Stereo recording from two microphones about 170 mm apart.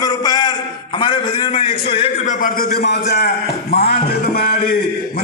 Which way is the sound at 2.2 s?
50° left (ahead or behind).